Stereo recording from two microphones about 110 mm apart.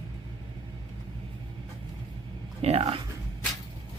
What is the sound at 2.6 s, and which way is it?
Speech, 65° right (ahead or behind).